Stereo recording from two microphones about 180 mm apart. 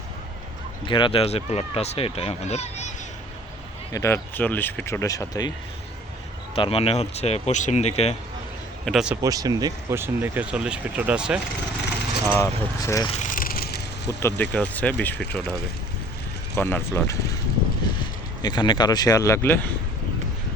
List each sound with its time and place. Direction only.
0.9 s speech: 25° left (ahead or behind)
3.9 s speech: 15° left (ahead or behind)
6.6 s speech: 30° left (ahead or behind)
8.8 s speech: centre (ahead or behind)
9.2 s speech: 20° right (ahead or behind)
12.3 s speech: 15° left (ahead or behind)
13.1 s a sound: 40° left (ahead or behind); by 14.2 s 65° left (ahead or behind)
14.2 s speech: 15° left (ahead or behind)
16.6 s speech: 10° left (ahead or behind)
18.4 s speech: 25° left (ahead or behind)